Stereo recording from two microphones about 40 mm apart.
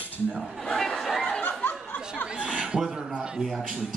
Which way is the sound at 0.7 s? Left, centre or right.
Centre.